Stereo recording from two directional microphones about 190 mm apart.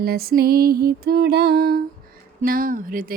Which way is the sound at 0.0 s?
55° right (ahead or behind).